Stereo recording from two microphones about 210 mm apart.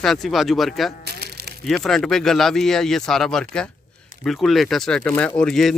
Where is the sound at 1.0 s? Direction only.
50° right (ahead or behind).